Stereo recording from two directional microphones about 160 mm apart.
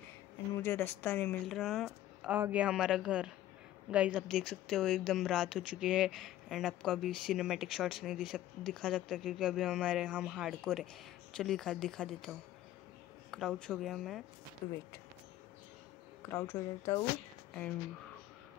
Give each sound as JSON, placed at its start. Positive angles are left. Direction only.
{"t": 0.7, "sound": "speech", "side_deg": 10}
{"t": 1.5, "sound": "a woman's voice", "side_deg": 0}
{"t": 4.3, "sound": "speech", "side_deg": 5}
{"t": 14.6, "sound": "speech", "side_deg": 15}
{"t": 16.2, "sound": "speech", "side_deg": 15}